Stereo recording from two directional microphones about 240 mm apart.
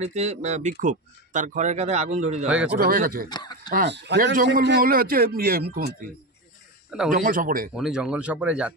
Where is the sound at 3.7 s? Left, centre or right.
Right.